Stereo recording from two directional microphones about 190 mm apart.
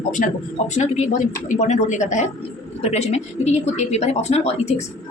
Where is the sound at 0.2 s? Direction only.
45° left (ahead or behind).